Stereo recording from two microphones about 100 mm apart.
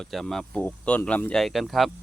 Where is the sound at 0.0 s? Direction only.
5° left (ahead or behind).